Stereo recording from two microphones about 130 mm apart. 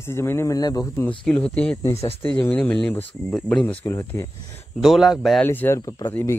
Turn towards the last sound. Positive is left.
turn(degrees=30)  # may be behind; listen again after turning